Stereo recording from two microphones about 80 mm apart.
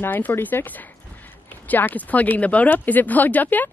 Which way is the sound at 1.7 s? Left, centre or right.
Left.